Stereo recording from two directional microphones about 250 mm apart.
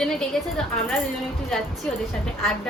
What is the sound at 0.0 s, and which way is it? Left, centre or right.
Speech, centre.